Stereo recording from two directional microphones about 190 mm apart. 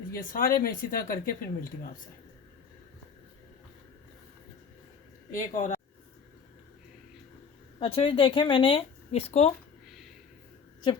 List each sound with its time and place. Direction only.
0.1 s speech: 45° left (ahead or behind)
5.3 s speech: 40° left (ahead or behind)
7.8 s speech: 30° left (ahead or behind)